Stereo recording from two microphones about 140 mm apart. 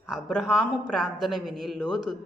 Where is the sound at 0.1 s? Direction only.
5° left (ahead or behind).